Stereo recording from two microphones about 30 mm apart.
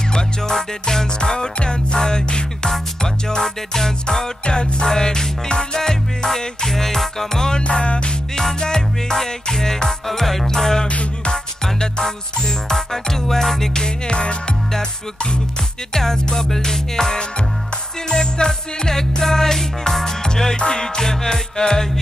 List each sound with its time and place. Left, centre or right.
0.5 s music: centre
4.5 s music: left
4.8 s music: left
7.5 s music: left
8.5 s music: left
13.8 s music: left
15.9 s music: centre
20.5 s music: left